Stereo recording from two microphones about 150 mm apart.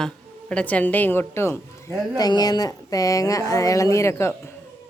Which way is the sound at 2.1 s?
25° left (ahead or behind).